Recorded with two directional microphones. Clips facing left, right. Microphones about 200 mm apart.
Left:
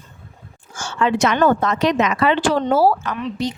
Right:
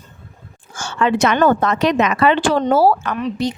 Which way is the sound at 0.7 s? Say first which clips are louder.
Right 2 dB; 60° right (ahead or behind).